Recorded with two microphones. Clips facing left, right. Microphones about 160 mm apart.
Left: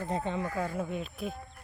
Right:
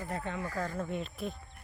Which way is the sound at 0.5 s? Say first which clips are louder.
Left 2 dB; 10° left (ahead or behind).